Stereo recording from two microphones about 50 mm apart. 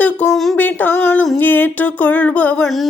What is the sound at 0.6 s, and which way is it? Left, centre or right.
Speech, left.